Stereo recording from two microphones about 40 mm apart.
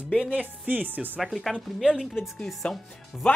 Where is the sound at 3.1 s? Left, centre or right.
Centre.